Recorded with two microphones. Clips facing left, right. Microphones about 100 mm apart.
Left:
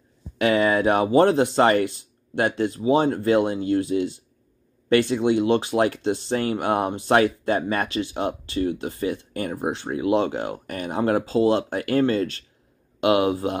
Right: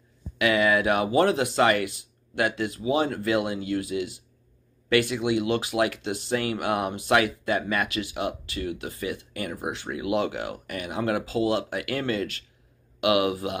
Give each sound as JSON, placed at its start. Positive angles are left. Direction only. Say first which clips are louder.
{"t": 0.4, "sound": "speech", "louder": "left 3 dB", "side_deg": 35}